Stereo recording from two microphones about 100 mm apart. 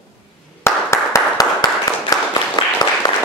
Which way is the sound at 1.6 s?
45° left (ahead or behind).